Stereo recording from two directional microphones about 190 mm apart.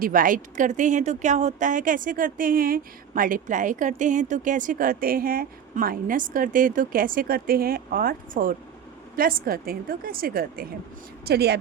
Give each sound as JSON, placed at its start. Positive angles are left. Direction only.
{"t": 0.0, "sound": "a woman's voice", "side_deg": -45}